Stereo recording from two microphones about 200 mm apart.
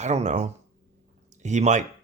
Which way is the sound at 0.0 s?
35° right (ahead or behind).